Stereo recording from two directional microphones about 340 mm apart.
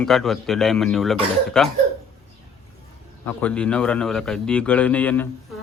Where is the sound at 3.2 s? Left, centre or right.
Centre.